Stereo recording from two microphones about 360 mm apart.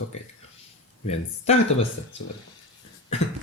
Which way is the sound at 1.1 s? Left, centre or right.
Centre.